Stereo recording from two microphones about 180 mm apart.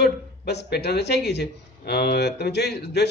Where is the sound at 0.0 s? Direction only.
65° left (ahead or behind).